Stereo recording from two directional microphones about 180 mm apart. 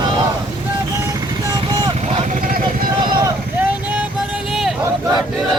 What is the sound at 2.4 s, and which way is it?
Vehicle, 55° right (ahead or behind).